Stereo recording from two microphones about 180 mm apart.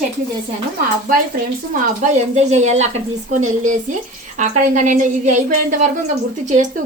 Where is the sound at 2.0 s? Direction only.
40° right (ahead or behind).